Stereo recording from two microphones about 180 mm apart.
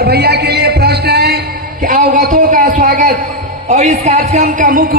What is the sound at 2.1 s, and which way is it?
Speech, 45° right (ahead or behind).